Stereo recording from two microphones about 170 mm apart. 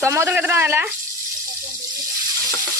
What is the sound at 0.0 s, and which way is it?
Speech, 15° right (ahead or behind).